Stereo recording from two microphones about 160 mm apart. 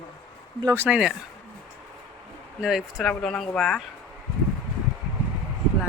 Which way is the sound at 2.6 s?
Centre (ahead or behind).